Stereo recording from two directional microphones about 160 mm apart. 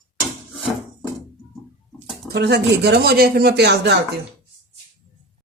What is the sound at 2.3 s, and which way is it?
Speech, 90° right.